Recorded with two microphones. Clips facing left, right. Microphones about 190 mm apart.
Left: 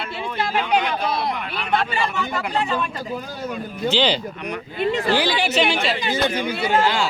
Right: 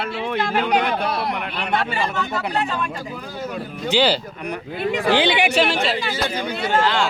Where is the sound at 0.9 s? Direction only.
65° right (ahead or behind).